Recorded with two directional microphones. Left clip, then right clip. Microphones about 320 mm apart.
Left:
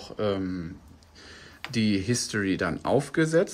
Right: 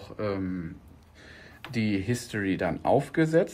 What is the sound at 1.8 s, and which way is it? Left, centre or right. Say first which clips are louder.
Speech: left 3 dB; centre.